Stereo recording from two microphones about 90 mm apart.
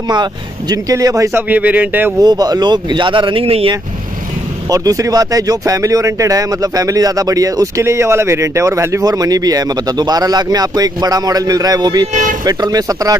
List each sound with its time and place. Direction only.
0.1 s speech: 50° right (ahead or behind); by 1.4 s 35° right (ahead or behind)
1.5 s speech: 20° right (ahead or behind)
2.2 s speech: 45° right (ahead or behind); by 3.7 s 90° right
4.6 s speech: 40° right (ahead or behind)